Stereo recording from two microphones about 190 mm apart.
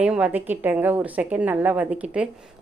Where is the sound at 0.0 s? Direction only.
5° right (ahead or behind).